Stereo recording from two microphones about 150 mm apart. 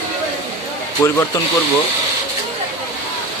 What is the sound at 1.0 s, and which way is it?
Speech, 20° left (ahead or behind).